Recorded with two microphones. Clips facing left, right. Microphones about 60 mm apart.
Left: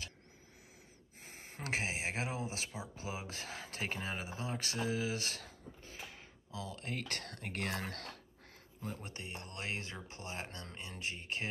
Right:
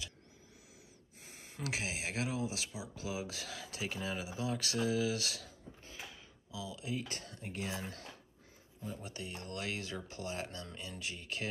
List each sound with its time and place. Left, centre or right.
1.2 s speech: left
8.8 s speech: left